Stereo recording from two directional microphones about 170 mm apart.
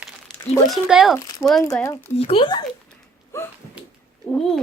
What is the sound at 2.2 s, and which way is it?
Speech, 35° left (ahead or behind).